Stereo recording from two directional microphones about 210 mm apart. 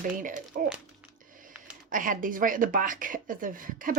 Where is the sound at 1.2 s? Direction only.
40° right (ahead or behind).